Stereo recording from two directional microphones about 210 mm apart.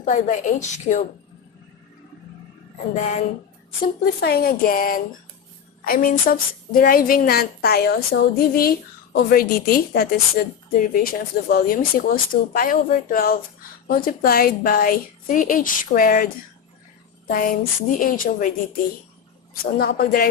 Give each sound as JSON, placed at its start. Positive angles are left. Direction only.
{"t": 0.0, "sound": "speech", "side_deg": 35}
{"t": 2.9, "sound": "speech", "side_deg": 35}
{"t": 4.0, "sound": "a woman's voice", "side_deg": 45}
{"t": 19.8, "sound": "a woman's voice", "side_deg": 50}